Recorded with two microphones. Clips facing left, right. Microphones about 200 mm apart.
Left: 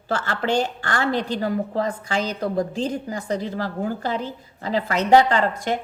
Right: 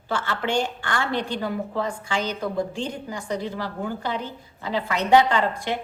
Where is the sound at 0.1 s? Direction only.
40° left (ahead or behind).